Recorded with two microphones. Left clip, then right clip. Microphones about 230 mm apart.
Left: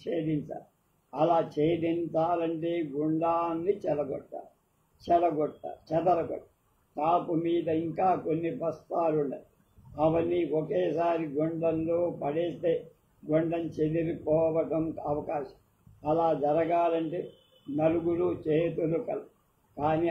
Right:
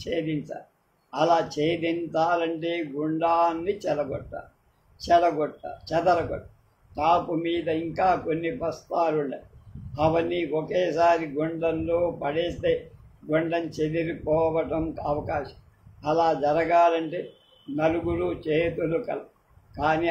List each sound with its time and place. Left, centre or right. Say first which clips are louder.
1.1 s speech: right 3 dB; right